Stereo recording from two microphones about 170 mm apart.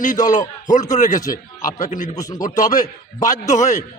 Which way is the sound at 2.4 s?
50° left (ahead or behind).